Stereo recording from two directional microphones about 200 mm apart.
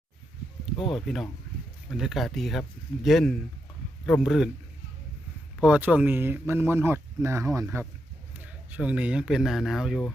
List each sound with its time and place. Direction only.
0.8 s speech: 25° left (ahead or behind)
1.0 s speech: centre (ahead or behind)
5.5 s speech: 5° right (ahead or behind)